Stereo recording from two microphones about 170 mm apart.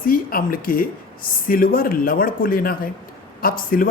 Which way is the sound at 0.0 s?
60° left (ahead or behind).